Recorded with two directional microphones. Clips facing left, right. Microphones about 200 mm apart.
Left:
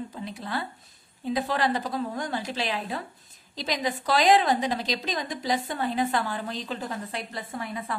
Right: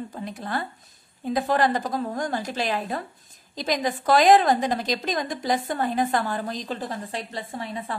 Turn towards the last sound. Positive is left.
turn(degrees=-30)  # may be behind; listen again after turning